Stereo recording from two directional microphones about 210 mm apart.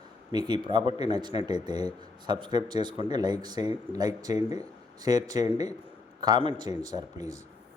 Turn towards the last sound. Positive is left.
turn(degrees=-15)  # may be behind; listen again after turning